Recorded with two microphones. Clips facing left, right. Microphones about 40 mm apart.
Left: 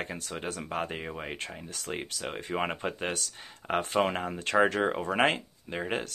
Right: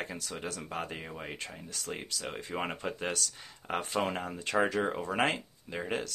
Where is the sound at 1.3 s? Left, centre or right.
Left.